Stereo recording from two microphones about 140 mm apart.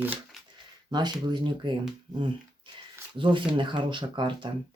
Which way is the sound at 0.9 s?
30° right (ahead or behind).